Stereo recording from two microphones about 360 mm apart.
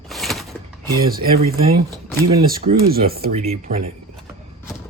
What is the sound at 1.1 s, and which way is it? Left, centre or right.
Speech, right.